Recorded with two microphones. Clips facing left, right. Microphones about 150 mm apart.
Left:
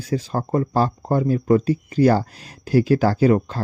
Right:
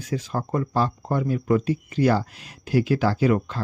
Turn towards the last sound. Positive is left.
turn(degrees=35)  # may be behind; listen again after turning